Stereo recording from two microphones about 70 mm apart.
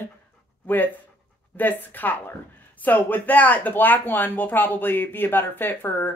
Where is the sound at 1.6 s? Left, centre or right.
Left.